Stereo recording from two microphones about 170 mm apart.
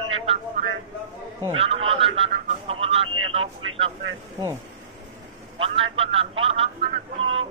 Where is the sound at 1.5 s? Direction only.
30° right (ahead or behind).